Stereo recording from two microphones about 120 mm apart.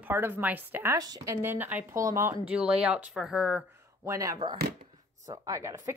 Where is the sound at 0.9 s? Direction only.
30° right (ahead or behind).